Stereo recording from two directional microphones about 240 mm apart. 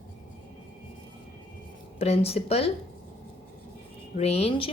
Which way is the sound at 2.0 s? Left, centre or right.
Left.